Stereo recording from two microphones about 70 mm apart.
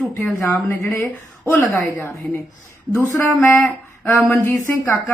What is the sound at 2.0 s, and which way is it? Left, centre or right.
A woman's voice, left.